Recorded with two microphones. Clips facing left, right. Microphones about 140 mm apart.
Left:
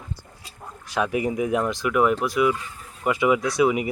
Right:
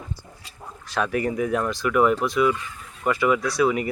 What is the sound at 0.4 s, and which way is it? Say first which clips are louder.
Speech: left 1 dB; 15° left (ahead or behind).